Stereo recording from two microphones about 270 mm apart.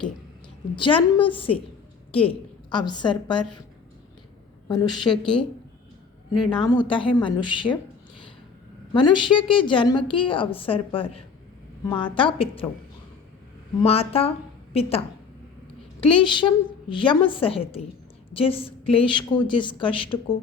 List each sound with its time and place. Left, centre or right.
0.8 s a woman's voice: centre
4.7 s a woman's voice: centre
5.0 s speech: centre
6.3 s a woman's voice: centre
8.9 s a woman's voice: centre
13.8 s a woman's voice: left
16.1 s a woman's voice: centre